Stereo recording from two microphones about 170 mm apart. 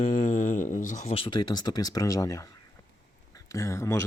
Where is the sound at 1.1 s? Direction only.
30° left (ahead or behind).